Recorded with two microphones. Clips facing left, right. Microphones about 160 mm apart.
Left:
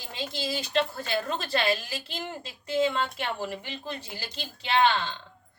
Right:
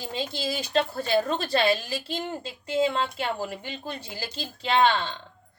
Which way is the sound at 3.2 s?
35° right (ahead or behind).